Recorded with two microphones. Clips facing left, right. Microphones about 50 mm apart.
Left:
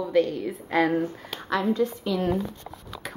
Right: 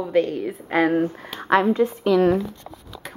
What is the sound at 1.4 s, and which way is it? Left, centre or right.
Speech, right.